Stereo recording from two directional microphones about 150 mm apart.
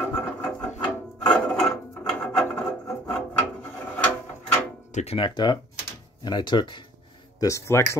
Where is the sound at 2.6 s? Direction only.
5° left (ahead or behind).